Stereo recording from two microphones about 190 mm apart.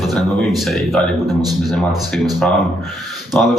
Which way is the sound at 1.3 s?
20° right (ahead or behind).